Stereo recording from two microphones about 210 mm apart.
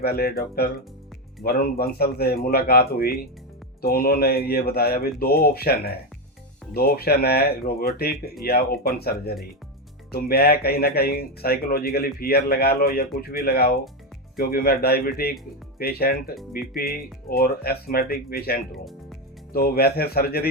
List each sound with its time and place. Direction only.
0.0 s speech: 45° left (ahead or behind)